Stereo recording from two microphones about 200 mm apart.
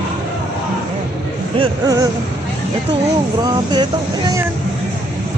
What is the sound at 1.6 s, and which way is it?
Speech, 20° right (ahead or behind).